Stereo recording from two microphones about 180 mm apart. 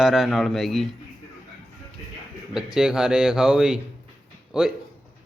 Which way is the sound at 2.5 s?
5° right (ahead or behind).